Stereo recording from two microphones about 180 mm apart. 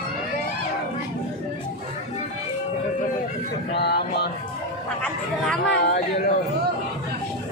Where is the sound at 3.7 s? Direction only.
65° left (ahead or behind).